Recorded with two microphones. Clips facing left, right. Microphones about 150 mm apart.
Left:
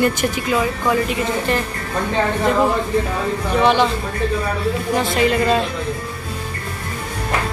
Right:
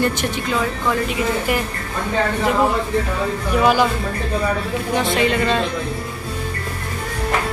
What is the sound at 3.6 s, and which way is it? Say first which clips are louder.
Speech: even; 5° right (ahead or behind).